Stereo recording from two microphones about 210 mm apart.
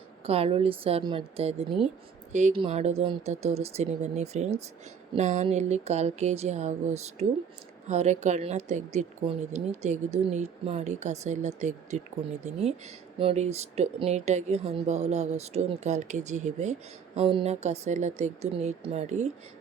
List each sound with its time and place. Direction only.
0.3 s a woman's voice: 30° right (ahead or behind)